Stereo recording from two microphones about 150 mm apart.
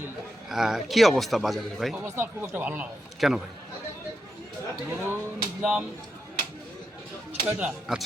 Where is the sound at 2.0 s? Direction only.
15° right (ahead or behind).